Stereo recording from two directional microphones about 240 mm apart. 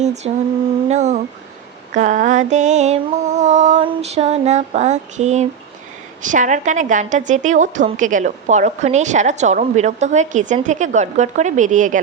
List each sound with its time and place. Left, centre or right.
0.0 s mantra: right
6.2 s a woman's voice: right